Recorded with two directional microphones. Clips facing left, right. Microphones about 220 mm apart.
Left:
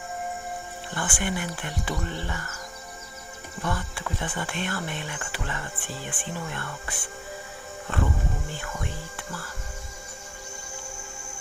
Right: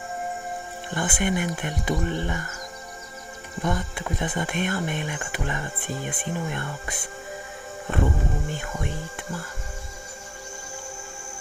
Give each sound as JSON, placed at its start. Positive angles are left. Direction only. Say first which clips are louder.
{"t": 0.9, "sound": "speech", "louder": "right 5 dB", "side_deg": -20}
{"t": 3.6, "sound": "speech", "louder": "right 4 dB", "side_deg": -20}